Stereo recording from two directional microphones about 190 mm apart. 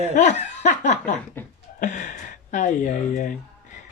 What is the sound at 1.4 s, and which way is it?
Chuckle, 10° left (ahead or behind).